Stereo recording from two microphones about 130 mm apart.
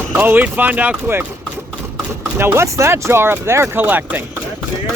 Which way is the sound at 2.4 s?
20° right (ahead or behind).